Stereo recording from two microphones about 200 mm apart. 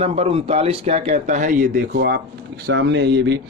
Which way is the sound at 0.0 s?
30° right (ahead or behind).